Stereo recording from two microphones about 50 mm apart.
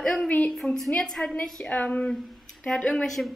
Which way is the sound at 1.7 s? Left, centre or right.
Left.